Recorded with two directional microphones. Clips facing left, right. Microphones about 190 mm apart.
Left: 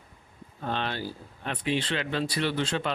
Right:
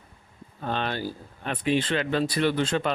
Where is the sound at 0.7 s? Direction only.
50° right (ahead or behind).